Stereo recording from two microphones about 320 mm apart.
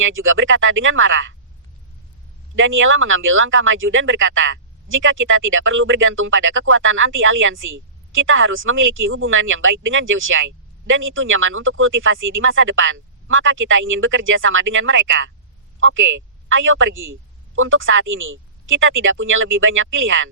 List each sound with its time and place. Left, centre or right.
0.0 s speech: right
2.6 s speech: right